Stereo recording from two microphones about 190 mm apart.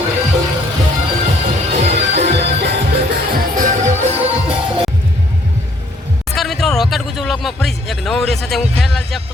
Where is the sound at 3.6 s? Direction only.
40° right (ahead or behind).